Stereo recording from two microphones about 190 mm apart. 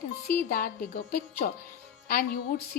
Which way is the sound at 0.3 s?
50° left (ahead or behind).